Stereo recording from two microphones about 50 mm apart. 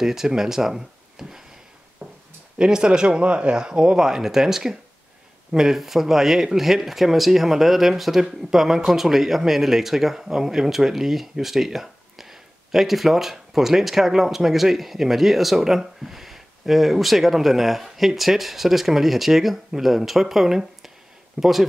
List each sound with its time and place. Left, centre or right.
0.0 s speech: centre
2.0 s a sound: centre
2.6 s speech: centre